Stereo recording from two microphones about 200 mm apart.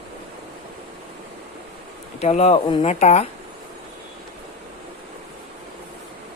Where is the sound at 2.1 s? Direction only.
30° left (ahead or behind).